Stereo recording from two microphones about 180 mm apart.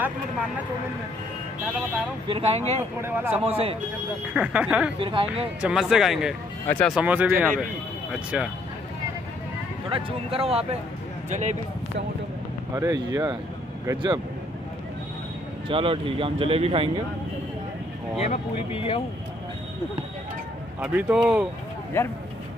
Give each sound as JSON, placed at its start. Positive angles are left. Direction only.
{"t": 2.2, "sound": "speech", "side_deg": -30}
{"t": 3.0, "sound": "speech", "side_deg": -10}
{"t": 5.0, "sound": "speech", "side_deg": -30}
{"t": 5.6, "sound": "speech", "side_deg": -5}
{"t": 7.0, "sound": "speech", "side_deg": -10}
{"t": 9.8, "sound": "speech", "side_deg": -30}
{"t": 12.7, "sound": "speech", "side_deg": -15}
{"t": 15.7, "sound": "speech", "side_deg": -30}
{"t": 18.2, "sound": "speech", "side_deg": 35}
{"t": 20.8, "sound": "speech", "side_deg": -5}